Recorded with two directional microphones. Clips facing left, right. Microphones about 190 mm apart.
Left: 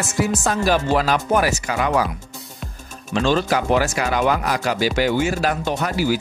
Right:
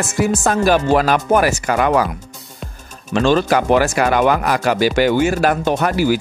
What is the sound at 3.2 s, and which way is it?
Speech, 55° right (ahead or behind).